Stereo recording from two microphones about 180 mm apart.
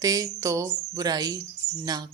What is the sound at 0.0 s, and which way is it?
Speech, 20° right (ahead or behind).